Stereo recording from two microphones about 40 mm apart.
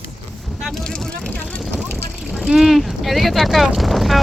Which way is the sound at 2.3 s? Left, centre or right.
Right.